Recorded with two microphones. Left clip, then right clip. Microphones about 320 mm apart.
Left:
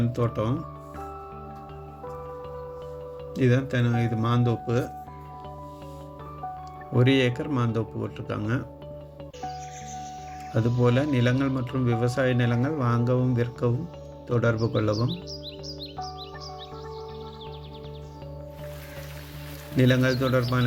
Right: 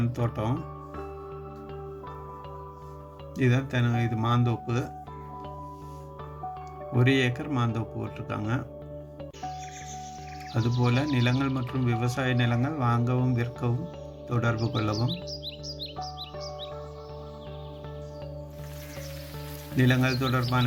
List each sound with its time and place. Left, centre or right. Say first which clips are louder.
0.0 s speech: left 4 dB; centre
3.3 s speech: left 3 dB; centre
6.9 s speech: left 3 dB; centre
10.5 s speech: left 5 dB; centre
19.7 s speech: left 3 dB; centre